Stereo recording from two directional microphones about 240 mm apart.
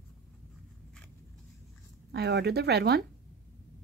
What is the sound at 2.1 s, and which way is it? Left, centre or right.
Speech, right.